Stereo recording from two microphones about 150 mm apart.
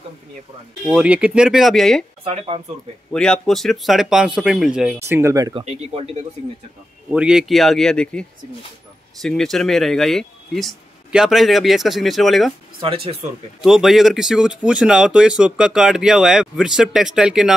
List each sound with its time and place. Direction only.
0.8 s speech: 5° right (ahead or behind)
2.2 s speech: 40° right (ahead or behind)
3.1 s speech: 5° left (ahead or behind)
5.0 s speech: 20° right (ahead or behind)
5.5 s speech: 35° right (ahead or behind)
7.1 s speech: 5° right (ahead or behind)
12.8 s speech: 40° right (ahead or behind)
13.6 s speech: centre (ahead or behind)